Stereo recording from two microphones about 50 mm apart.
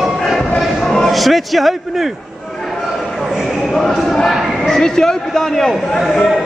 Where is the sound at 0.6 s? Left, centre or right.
Centre.